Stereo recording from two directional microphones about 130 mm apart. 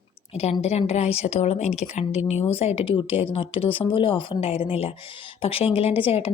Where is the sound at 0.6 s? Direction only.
55° left (ahead or behind).